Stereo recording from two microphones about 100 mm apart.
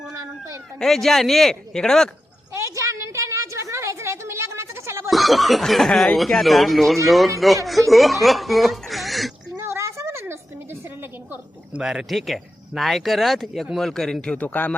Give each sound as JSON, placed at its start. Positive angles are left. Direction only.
{"t": 0.1, "sound": "cat", "side_deg": -30}
{"t": 0.8, "sound": "speech", "side_deg": 5}
{"t": 2.5, "sound": "a sound", "side_deg": -30}
{"t": 5.1, "sound": "speech", "side_deg": 0}
{"t": 9.6, "sound": "a sound", "side_deg": -25}
{"t": 11.8, "sound": "speech", "side_deg": -5}